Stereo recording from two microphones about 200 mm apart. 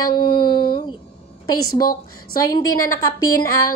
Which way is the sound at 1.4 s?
90° left.